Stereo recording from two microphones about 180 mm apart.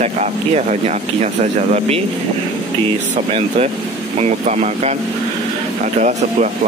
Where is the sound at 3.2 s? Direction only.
40° right (ahead or behind).